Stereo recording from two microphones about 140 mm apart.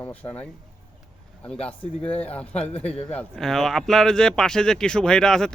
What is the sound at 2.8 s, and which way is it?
Speech, 45° left (ahead or behind).